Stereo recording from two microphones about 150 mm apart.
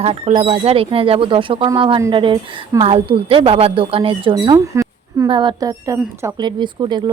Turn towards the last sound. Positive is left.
turn(degrees=-30)  # may be behind; listen again after turning